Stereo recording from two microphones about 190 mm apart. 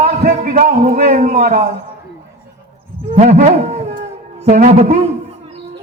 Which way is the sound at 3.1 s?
40° right (ahead or behind).